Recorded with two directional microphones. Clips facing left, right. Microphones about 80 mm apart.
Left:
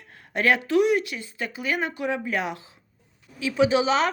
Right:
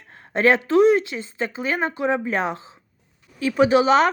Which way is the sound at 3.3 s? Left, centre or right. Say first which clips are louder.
Right 4 dB; right.